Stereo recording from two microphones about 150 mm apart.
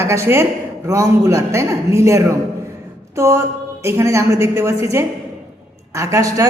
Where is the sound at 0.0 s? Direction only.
20° right (ahead or behind).